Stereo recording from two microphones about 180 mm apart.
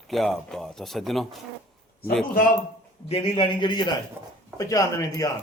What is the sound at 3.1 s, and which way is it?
A man's voice, 30° left (ahead or behind).